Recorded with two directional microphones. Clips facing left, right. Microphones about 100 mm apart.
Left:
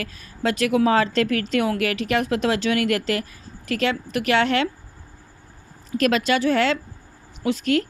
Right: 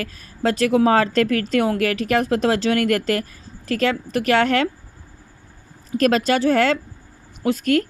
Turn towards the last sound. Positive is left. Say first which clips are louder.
# right 2 dB
turn(degrees=-45)  # may be behind; listen again after turning